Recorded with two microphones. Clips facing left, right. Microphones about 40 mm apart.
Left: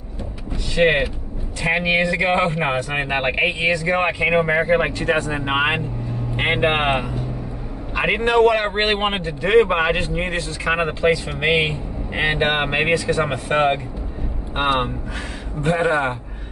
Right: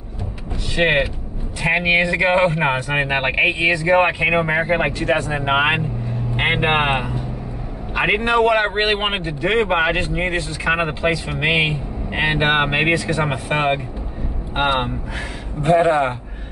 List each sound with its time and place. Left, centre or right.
0.7 s speech: centre
2.2 s speech: centre
4.9 s a man's voice: centre
15.6 s speech: centre